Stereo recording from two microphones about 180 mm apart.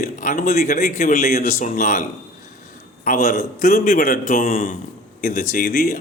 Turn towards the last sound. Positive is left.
turn(degrees=50)  # may be behind; listen again after turning